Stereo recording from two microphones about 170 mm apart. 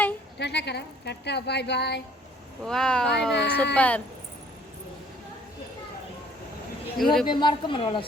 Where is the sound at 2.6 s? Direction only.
5° left (ahead or behind).